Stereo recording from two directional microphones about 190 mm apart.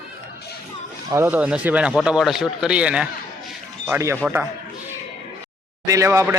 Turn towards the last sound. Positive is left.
turn(degrees=-15)  # may be behind; listen again after turning